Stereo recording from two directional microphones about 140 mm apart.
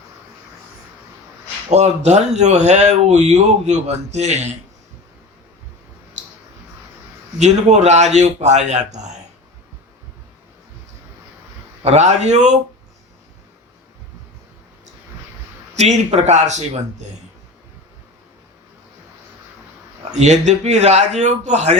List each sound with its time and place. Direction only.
1.7 s speech: 55° right (ahead or behind)
7.3 s a man's voice: 55° right (ahead or behind)
11.8 s speech: 50° right (ahead or behind)
15.7 s a man's voice: 55° right (ahead or behind)
20.1 s speech: 55° right (ahead or behind)